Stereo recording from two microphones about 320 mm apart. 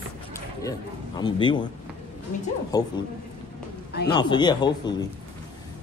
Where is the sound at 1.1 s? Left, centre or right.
Centre.